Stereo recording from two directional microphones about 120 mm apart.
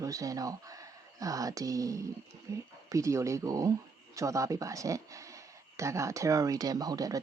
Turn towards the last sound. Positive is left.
turn(degrees=-30)  # may be behind; listen again after turning